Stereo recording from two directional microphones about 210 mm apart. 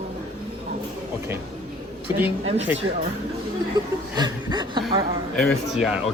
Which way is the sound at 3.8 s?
20° right (ahead or behind).